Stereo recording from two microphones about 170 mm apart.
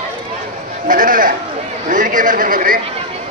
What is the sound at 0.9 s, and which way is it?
A man's voice, 55° right (ahead or behind).